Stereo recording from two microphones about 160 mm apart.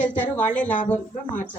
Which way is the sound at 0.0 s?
50° left (ahead or behind).